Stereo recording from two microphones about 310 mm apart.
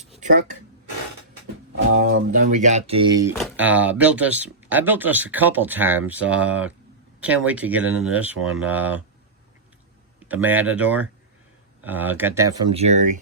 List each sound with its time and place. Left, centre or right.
0.0 s a sound: right
1.7 s music: right
2.3 s speech: right; by 9.0 s centre
10.2 s speech: centre
12.7 s speech: right